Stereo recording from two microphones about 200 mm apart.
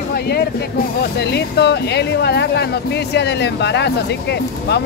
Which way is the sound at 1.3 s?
60° left (ahead or behind).